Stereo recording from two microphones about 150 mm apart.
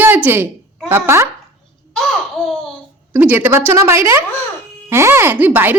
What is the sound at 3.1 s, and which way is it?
Speech, 15° right (ahead or behind).